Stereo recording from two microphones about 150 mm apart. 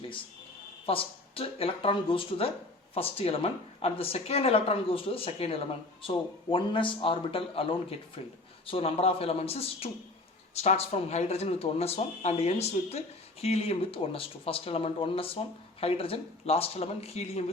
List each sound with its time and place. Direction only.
0.9 s speech: 40° left (ahead or behind)